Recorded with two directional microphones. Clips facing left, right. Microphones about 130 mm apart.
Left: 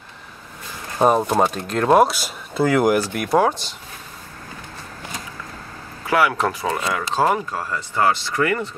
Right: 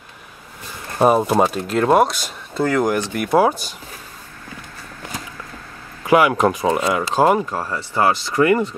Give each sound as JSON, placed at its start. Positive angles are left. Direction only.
{"t": 0.9, "sound": "speech", "side_deg": -5}
{"t": 6.0, "sound": "speech", "side_deg": -15}